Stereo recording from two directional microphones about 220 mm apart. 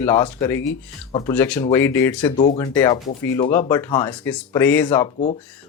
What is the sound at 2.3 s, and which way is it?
Speech, 25° left (ahead or behind).